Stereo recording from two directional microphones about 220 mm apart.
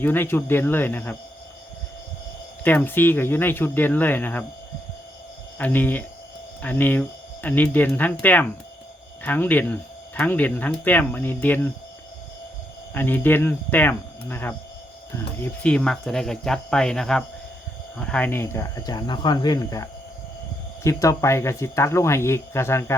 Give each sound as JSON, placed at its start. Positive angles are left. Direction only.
{"t": 0.0, "sound": "speech", "side_deg": 10}
{"t": 2.6, "sound": "speech", "side_deg": 10}
{"t": 5.5, "sound": "speech", "side_deg": 10}
{"t": 12.9, "sound": "speech", "side_deg": 10}